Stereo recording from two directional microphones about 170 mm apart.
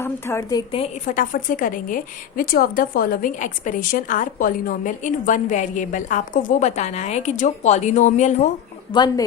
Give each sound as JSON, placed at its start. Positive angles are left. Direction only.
{"t": 0.0, "sound": "a woman's voice", "side_deg": 15}
{"t": 1.0, "sound": "a woman's voice", "side_deg": 50}
{"t": 8.9, "sound": "speech", "side_deg": 25}